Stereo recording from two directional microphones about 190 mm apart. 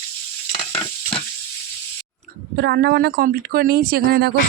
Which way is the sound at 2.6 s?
60° right (ahead or behind).